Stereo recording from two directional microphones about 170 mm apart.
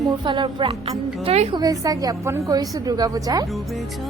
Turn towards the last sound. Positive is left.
turn(degrees=-20)  # may be behind; listen again after turning